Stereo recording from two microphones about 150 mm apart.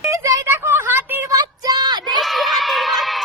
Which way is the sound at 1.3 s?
25° right (ahead or behind).